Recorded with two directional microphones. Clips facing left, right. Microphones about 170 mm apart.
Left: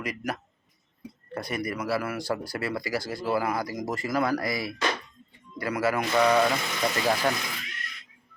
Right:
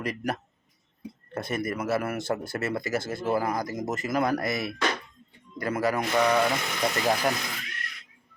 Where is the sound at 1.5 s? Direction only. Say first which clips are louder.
Right 2 dB; 45° right (ahead or behind).